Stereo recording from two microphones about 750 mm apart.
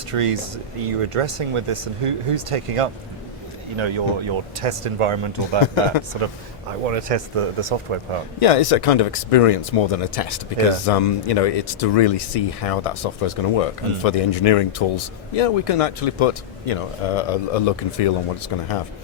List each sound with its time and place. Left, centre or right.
0.1 s speech: right
8.4 s speech: left